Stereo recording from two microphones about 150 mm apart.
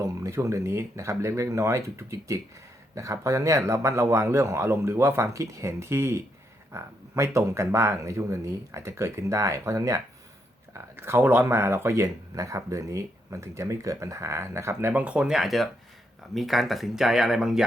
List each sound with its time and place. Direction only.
0.0 s speech: 20° right (ahead or behind); by 17.6 s 5° right (ahead or behind)